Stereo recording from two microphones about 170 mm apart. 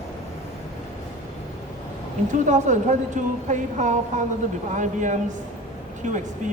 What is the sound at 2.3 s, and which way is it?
A woman's voice, 45° right (ahead or behind).